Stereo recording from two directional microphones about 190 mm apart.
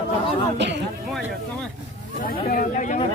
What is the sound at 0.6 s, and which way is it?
Speech, 65° right (ahead or behind).